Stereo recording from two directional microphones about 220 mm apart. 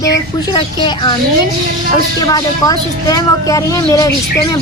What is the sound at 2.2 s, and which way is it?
Speech, 15° left (ahead or behind).